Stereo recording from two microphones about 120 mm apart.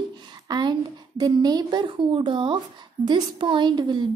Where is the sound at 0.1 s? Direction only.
35° right (ahead or behind).